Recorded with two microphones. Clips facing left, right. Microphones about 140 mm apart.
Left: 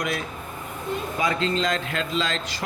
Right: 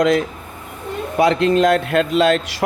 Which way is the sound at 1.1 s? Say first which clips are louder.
Right 11 dB; 70° right (ahead or behind).